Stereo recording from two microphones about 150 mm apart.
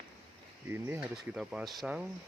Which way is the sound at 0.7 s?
15° right (ahead or behind).